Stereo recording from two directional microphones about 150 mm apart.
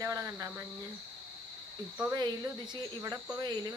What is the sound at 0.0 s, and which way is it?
Cricket, 20° right (ahead or behind).